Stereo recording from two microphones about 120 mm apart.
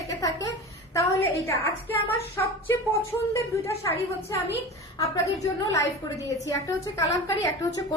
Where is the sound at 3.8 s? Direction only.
30° left (ahead or behind).